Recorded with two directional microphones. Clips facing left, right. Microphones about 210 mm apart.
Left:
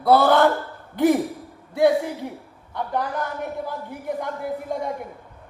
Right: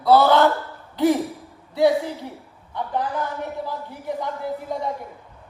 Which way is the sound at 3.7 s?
50° left (ahead or behind).